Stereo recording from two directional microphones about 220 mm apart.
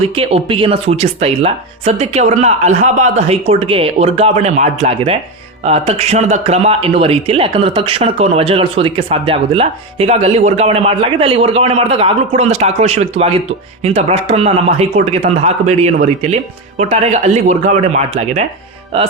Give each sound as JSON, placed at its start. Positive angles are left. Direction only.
{"t": 0.0, "sound": "speech", "side_deg": -25}